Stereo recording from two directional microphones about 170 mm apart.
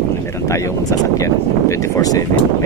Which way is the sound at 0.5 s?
20° left (ahead or behind).